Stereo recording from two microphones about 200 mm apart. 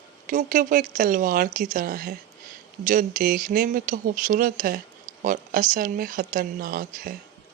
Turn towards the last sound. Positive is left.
turn(degrees=-45)  # may be behind; listen again after turning